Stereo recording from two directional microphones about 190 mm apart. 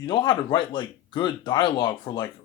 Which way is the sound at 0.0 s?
25° left (ahead or behind).